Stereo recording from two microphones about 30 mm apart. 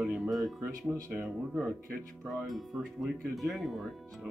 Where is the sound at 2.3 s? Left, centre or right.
Centre.